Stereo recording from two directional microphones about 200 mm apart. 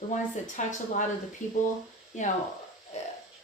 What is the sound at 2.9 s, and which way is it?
Speech, 35° left (ahead or behind).